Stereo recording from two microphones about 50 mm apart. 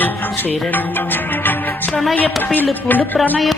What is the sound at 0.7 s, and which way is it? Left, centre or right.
Music, left.